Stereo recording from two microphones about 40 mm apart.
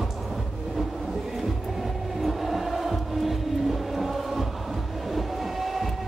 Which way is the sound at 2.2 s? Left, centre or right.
Centre.